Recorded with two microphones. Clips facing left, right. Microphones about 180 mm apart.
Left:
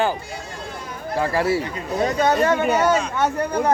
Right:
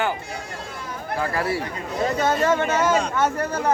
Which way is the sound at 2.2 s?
15° left (ahead or behind).